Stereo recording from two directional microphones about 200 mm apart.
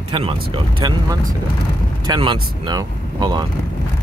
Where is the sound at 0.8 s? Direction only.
20° right (ahead or behind).